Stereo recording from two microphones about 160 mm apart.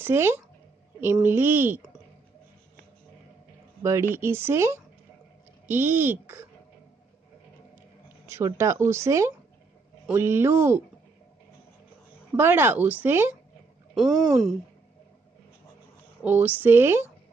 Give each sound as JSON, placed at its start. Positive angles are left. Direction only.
{"t": 0.0, "sound": "speech", "side_deg": -15}
{"t": 3.8, "sound": "speech", "side_deg": -15}
{"t": 8.3, "sound": "speech", "side_deg": -15}
{"t": 12.4, "sound": "speech", "side_deg": -15}
{"t": 13.9, "sound": "speech", "side_deg": 0}
{"t": 16.2, "sound": "speech", "side_deg": -10}